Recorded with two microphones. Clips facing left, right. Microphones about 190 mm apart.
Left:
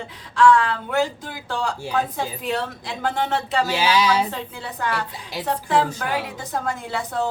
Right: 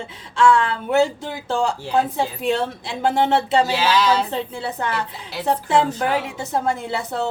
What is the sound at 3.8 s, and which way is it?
Speech, 10° left (ahead or behind).